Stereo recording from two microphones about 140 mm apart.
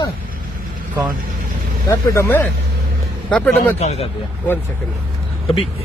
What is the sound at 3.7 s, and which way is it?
Speech, 50° left (ahead or behind).